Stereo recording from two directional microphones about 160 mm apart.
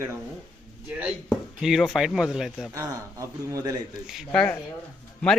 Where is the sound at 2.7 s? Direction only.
20° right (ahead or behind).